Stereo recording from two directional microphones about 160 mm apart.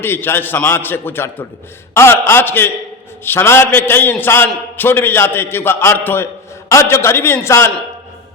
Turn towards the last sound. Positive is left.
turn(degrees=15)  # may be behind; listen again after turning